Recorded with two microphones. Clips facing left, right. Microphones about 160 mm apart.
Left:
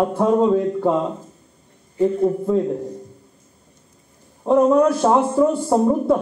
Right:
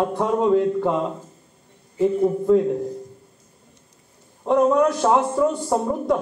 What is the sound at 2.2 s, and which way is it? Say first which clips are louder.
Speech: right 1 dB; 20° left (ahead or behind).